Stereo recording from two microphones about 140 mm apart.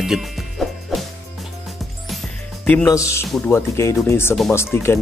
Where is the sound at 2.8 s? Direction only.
20° left (ahead or behind).